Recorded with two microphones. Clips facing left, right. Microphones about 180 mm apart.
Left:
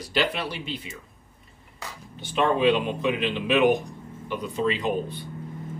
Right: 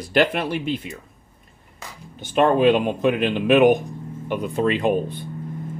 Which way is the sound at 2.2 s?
50° right (ahead or behind).